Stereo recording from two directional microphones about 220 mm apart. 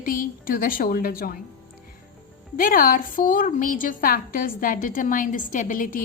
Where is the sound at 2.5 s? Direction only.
40° left (ahead or behind).